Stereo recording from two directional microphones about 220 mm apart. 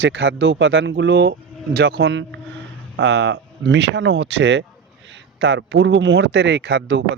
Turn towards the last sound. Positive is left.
turn(degrees=-55)  # may be behind; listen again after turning